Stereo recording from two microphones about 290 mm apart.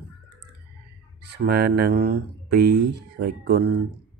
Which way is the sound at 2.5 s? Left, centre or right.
Right.